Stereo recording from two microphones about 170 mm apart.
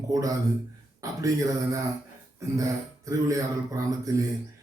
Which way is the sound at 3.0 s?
20° right (ahead or behind).